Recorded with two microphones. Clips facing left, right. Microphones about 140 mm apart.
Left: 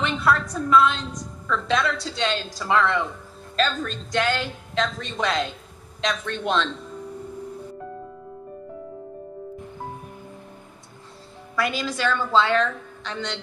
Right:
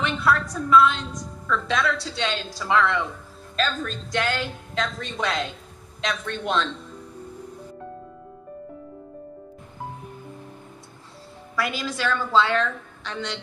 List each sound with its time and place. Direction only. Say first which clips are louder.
0.0 s a sound: left 1 dB; centre (ahead or behind)
1.5 s a woman's voice: left 1 dB; centre (ahead or behind)
11.5 s a woman's voice: left 2 dB; centre (ahead or behind)